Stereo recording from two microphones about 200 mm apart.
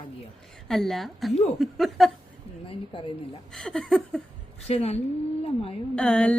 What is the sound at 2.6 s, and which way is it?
Speech, 25° left (ahead or behind).